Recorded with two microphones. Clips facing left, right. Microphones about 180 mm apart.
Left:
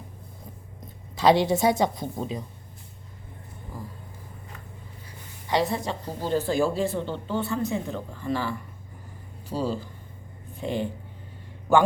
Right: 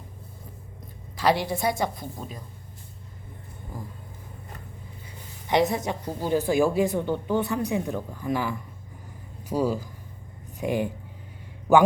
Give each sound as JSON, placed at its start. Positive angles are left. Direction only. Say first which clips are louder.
{"t": 1.1, "sound": "a woman's voice", "louder": "left 4 dB", "side_deg": 25}
{"t": 5.5, "sound": "speech", "louder": "right 2 dB", "side_deg": -20}